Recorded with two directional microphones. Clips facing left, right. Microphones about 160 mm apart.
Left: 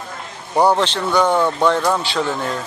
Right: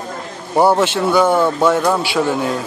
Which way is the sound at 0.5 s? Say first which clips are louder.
Right 2 dB; 5° right (ahead or behind).